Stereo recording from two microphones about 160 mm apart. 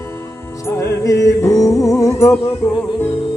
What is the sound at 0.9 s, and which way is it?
A capella, 20° left (ahead or behind).